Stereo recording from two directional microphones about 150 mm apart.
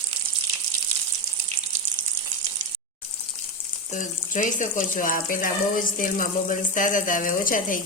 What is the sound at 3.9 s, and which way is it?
Speech, 55° left (ahead or behind).